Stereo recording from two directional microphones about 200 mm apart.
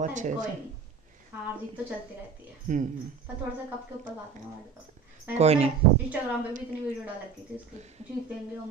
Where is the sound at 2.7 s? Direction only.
35° right (ahead or behind).